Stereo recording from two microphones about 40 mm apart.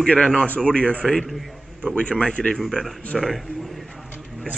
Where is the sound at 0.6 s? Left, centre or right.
Left.